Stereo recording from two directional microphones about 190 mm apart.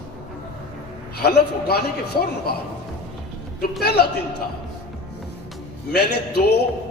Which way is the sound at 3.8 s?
60° left (ahead or behind).